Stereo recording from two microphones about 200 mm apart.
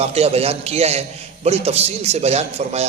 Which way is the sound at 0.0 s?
30° right (ahead or behind).